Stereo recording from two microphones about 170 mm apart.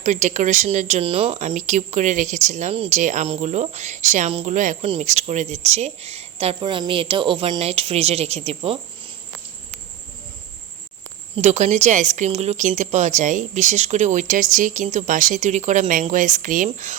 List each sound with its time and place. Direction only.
0.0 s speech: 45° right (ahead or behind)
1.4 s speech: 45° right (ahead or behind)
11.3 s speech: 40° right (ahead or behind)